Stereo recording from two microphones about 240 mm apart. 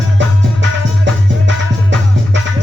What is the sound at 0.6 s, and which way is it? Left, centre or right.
Music, right.